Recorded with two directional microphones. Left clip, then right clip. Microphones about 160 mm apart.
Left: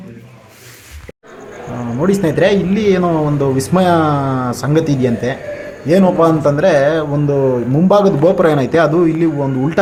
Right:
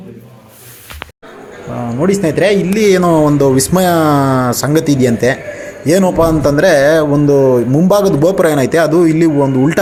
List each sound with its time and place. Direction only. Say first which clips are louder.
2.0 s speech: right 1 dB; 10° right (ahead or behind)
2.8 s a man's voice: right 7 dB; 25° right (ahead or behind)